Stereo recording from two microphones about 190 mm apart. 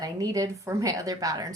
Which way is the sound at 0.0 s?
20° right (ahead or behind).